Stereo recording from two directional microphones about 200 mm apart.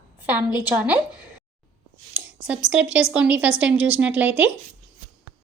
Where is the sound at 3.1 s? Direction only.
5° right (ahead or behind).